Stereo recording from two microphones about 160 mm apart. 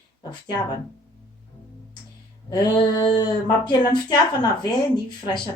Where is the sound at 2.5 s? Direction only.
30° left (ahead or behind).